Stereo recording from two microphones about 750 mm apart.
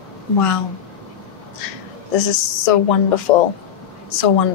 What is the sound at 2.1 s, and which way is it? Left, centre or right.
Speech, left.